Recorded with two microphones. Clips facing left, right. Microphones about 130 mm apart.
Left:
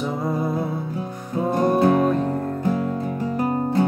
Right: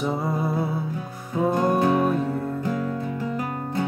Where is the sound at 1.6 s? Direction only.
25° left (ahead or behind).